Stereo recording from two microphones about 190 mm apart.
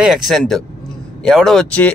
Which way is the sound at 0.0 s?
Centre (ahead or behind).